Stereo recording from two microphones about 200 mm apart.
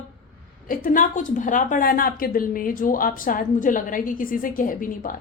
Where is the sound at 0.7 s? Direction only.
45° left (ahead or behind).